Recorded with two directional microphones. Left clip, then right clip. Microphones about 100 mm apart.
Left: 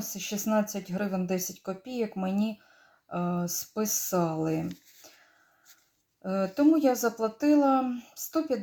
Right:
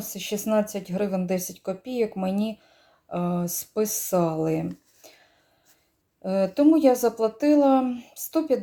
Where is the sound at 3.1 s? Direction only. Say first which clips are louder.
Right 3 dB; 15° right (ahead or behind).